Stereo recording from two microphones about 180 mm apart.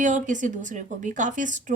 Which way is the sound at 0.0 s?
45° right (ahead or behind).